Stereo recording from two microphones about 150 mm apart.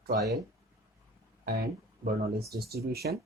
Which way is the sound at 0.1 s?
90° right.